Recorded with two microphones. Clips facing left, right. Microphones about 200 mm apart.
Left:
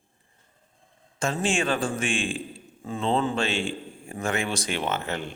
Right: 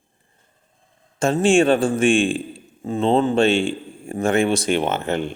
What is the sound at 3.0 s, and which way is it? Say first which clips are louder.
A man's voice: right 8 dB; 25° right (ahead or behind).